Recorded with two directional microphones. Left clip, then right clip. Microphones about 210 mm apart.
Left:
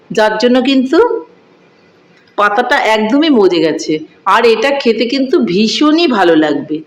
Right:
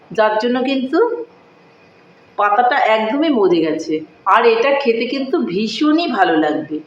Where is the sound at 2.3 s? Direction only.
55° left (ahead or behind).